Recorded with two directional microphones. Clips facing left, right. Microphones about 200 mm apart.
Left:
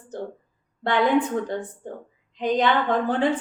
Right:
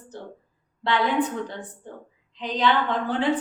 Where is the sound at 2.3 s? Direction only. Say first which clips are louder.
Left 2 dB; 50° left (ahead or behind).